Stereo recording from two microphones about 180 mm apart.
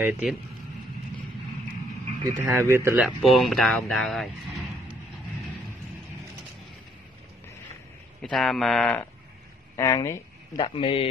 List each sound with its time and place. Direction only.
0.0 s speech: 5° right (ahead or behind)
2.2 s speech: 15° right (ahead or behind)
3.2 s speech: centre (ahead or behind)
8.2 s speech: centre (ahead or behind)
9.8 s speech: 15° left (ahead or behind)
10.6 s a man's voice: 30° left (ahead or behind)